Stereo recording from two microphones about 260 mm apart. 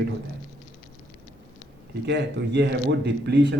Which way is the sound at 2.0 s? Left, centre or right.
Right.